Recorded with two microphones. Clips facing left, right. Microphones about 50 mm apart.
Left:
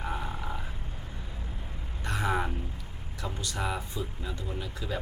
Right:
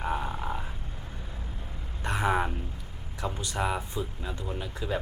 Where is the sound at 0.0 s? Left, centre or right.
Centre.